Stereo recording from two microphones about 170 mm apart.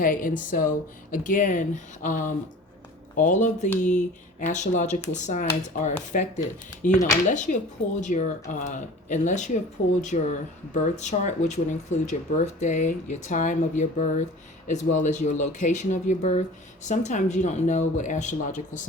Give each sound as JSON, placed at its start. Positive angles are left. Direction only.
{"t": 0.0, "sound": "speech", "side_deg": 50}